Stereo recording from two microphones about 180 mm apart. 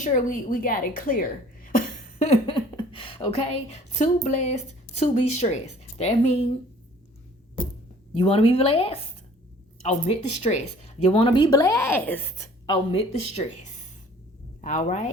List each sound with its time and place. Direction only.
0.0 s a woman's voice: 45° left (ahead or behind)
8.1 s speech: 30° left (ahead or behind)
10.1 s speech: 40° left (ahead or behind); by 12.2 s 10° left (ahead or behind)
12.6 s speech: 30° left (ahead or behind)